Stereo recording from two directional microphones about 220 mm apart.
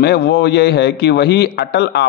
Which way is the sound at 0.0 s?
45° left (ahead or behind).